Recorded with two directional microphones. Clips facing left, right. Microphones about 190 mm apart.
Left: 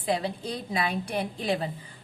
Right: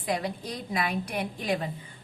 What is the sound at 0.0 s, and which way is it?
A woman's voice, 30° left (ahead or behind).